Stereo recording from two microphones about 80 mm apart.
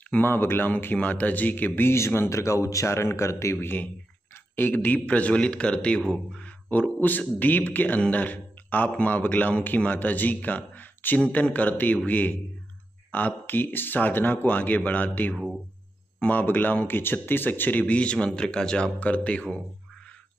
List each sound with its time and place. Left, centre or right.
0.2 s speech: left
3.6 s a man's voice: left
15.3 s speech: centre
16.2 s a man's voice: left